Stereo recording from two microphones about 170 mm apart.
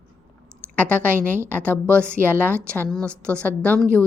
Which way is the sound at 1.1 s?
15° right (ahead or behind).